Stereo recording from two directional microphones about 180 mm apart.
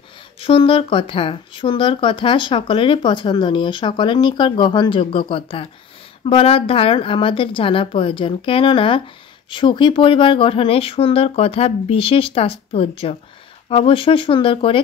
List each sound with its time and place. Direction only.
0.4 s speech: 30° left (ahead or behind)